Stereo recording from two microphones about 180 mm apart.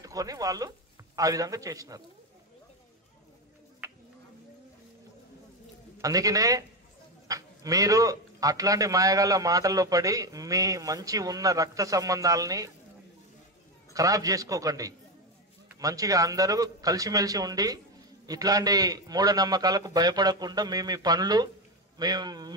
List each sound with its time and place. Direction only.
0.0 s speech: 20° right (ahead or behind)
5.9 s speech: 20° right (ahead or behind)
13.9 s speech: 20° right (ahead or behind)